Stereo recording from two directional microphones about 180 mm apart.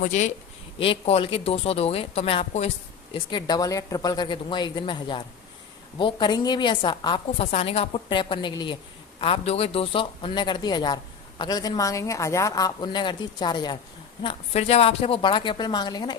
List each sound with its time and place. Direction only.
0.0 s speech: 40° left (ahead or behind)
3.2 s speech: 25° left (ahead or behind)